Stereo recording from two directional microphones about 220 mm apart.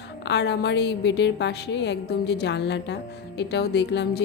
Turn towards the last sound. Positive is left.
turn(degrees=50)  # may be behind; listen again after turning